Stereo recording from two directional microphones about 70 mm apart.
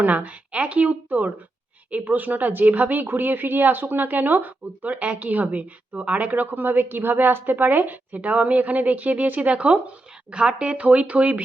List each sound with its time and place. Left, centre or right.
0.0 s a woman's voice: right